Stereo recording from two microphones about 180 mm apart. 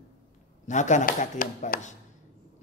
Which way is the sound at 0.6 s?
40° left (ahead or behind).